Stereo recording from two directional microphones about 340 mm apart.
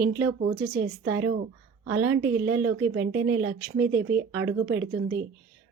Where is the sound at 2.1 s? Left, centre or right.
Right.